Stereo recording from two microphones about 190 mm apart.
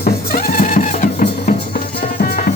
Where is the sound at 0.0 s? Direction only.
55° left (ahead or behind).